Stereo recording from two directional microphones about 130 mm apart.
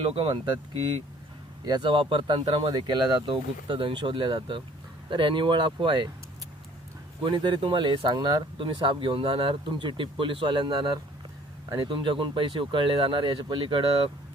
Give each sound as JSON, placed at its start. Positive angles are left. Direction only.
{"t": 0.0, "sound": "speech", "side_deg": -45}
{"t": 1.6, "sound": "speech", "side_deg": -35}
{"t": 7.2, "sound": "speech", "side_deg": -40}